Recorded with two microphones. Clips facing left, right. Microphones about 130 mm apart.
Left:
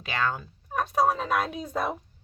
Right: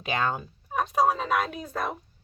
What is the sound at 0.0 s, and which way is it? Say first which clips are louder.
Speech: right 1 dB; 20° right (ahead or behind).